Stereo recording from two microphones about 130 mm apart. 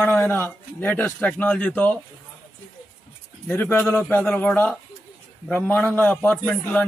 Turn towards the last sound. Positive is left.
turn(degrees=10)  # may be behind; listen again after turning